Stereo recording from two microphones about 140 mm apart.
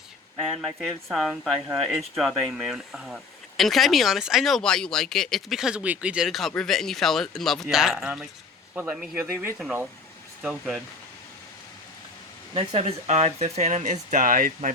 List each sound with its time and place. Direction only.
0.4 s speech: centre (ahead or behind)
10.4 s speech: centre (ahead or behind)
12.5 s speech: 50° right (ahead or behind); by 14.7 s 80° right